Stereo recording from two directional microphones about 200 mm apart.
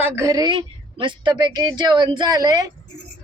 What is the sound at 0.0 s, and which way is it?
A woman's voice, 15° right (ahead or behind).